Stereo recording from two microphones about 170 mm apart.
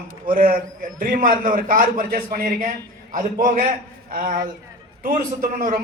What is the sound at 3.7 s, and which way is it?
A man's voice, 55° right (ahead or behind).